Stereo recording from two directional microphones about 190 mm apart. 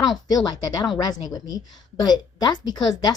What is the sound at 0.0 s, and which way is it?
A woman's voice, 20° left (ahead or behind).